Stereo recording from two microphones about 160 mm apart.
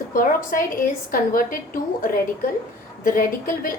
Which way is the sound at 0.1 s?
60° left (ahead or behind).